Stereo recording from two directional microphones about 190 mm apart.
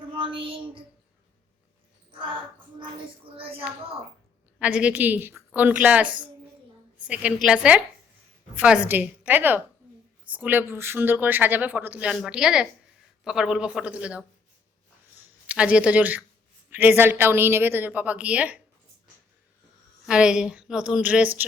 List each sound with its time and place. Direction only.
0.1 s child singing: 25° right (ahead or behind)
4.6 s a woman's voice: 5° right (ahead or behind)
15.4 s speech: 5° right (ahead or behind)
20.1 s a woman's voice: 5° right (ahead or behind)